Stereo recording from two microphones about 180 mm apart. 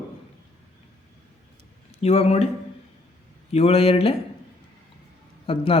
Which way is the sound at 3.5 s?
35° left (ahead or behind).